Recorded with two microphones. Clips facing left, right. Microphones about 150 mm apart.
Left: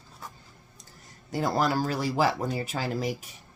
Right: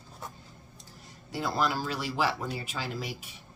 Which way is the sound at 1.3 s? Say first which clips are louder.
Left 4 dB; 45° left (ahead or behind).